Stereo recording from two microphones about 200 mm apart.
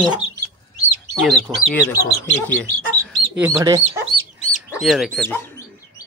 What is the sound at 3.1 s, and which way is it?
Speech, 10° right (ahead or behind).